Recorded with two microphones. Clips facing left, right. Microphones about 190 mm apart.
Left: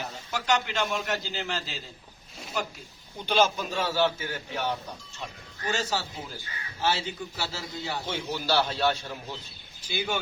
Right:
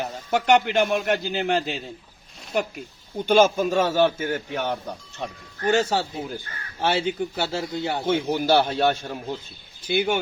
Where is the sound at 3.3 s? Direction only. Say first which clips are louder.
Right 7 dB; 50° right (ahead or behind).